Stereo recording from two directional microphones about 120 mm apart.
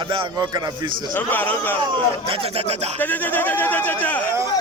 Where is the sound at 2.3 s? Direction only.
55° right (ahead or behind).